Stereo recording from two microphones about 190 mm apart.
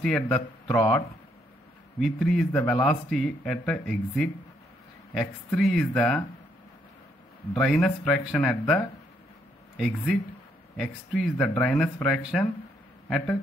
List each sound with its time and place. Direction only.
0.0 s a man's voice: 5° left (ahead or behind)
7.5 s a man's voice: centre (ahead or behind)
9.8 s a man's voice: centre (ahead or behind)